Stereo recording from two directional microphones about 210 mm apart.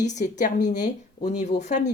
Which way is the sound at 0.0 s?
35° left (ahead or behind).